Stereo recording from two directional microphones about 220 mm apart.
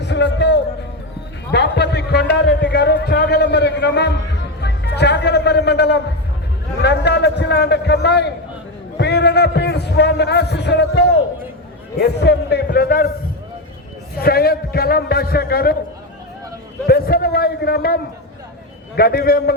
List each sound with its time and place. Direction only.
0.0 s music: 55° left (ahead or behind)
1.5 s a sound: 50° left (ahead or behind)
6.8 s a man's voice: 50° left (ahead or behind)
14.2 s a man's voice: 45° left (ahead or behind)
16.8 s a man's voice: 45° left (ahead or behind)